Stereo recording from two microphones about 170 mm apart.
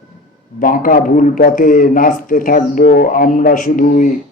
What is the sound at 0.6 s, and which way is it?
A man's voice, 55° left (ahead or behind).